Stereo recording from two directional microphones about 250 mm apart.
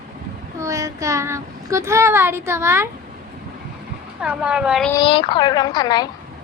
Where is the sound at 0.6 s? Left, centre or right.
Centre.